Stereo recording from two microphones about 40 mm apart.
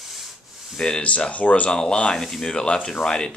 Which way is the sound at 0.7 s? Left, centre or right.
Centre.